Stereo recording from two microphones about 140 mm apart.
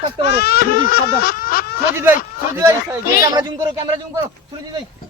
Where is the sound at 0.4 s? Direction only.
90° left.